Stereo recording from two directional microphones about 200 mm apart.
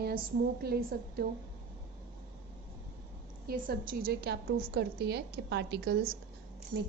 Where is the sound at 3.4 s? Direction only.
45° right (ahead or behind).